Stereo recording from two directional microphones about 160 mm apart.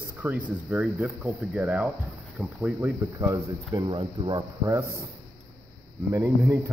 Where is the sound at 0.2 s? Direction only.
15° right (ahead or behind).